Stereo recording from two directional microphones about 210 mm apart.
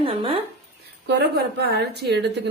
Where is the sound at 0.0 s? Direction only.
25° right (ahead or behind).